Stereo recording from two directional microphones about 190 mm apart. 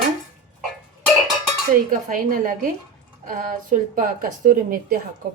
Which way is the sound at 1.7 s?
45° right (ahead or behind).